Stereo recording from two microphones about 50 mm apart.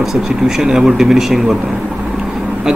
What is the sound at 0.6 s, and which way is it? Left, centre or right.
Speech, centre.